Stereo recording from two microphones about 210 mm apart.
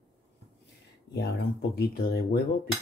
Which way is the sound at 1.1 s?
50° left (ahead or behind).